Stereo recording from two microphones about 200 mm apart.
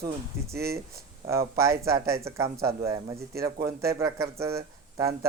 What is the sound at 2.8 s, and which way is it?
Speech, 15° right (ahead or behind).